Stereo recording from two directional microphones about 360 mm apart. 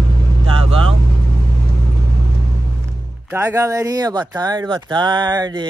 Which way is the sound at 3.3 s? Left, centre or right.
Centre.